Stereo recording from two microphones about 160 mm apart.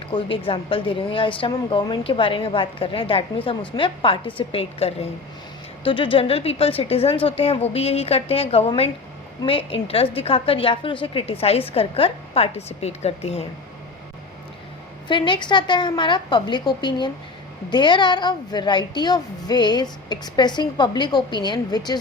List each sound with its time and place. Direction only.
0.1 s a woman's voice: 30° left (ahead or behind)
15.0 s a woman's voice: 30° left (ahead or behind)